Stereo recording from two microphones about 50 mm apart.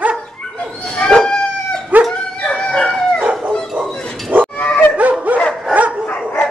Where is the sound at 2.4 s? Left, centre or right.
Left.